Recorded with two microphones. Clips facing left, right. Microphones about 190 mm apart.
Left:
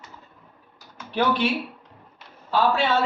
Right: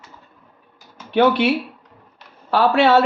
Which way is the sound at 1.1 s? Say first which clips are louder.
Right 7 dB; 70° right (ahead or behind).